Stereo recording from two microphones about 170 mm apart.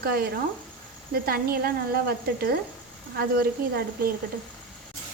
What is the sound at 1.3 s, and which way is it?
A woman's voice, 65° right (ahead or behind).